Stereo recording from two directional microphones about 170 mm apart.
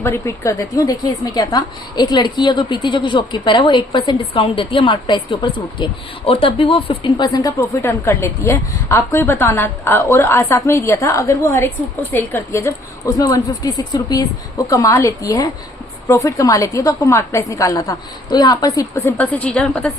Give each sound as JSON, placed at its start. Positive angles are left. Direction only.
{"t": 0.0, "sound": "a woman's voice", "side_deg": 15}
{"t": 7.8, "sound": "a woman's voice", "side_deg": 15}